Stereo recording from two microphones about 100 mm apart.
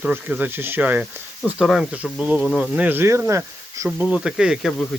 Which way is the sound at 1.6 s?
5° right (ahead or behind).